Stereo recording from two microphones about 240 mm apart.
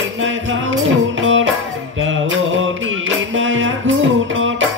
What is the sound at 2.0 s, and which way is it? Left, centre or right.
Mantra, right.